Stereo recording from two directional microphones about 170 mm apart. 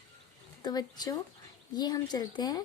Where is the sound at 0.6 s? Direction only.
25° left (ahead or behind).